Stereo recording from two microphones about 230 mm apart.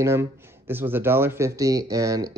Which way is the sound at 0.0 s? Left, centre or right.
Centre.